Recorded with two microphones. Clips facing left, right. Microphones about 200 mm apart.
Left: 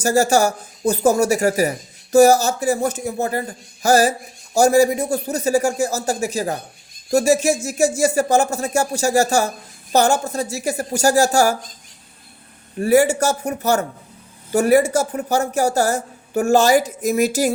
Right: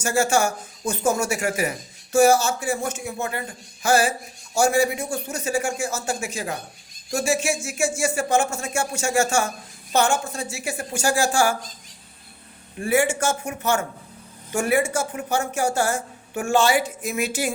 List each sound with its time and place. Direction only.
0.0 s a woman's voice: 40° left (ahead or behind)
12.8 s a woman's voice: 40° left (ahead or behind)